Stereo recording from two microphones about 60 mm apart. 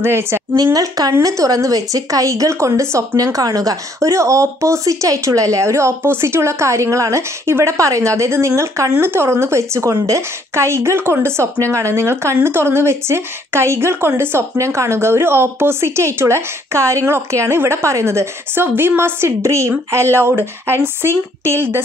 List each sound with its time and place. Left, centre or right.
0.0 s speech: right
0.7 s speech: right
1.2 s speech: right
3.3 s speech: right
7.7 s speech: right
9.0 s speech: right